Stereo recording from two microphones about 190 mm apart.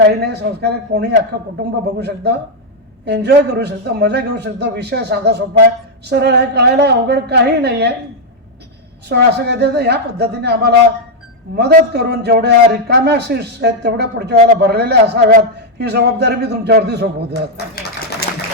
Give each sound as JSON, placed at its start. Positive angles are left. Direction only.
{"t": 0.2, "sound": "a man's voice", "side_deg": -60}
{"t": 9.0, "sound": "a man's voice", "side_deg": -65}
{"t": 17.8, "sound": "speech", "side_deg": 50}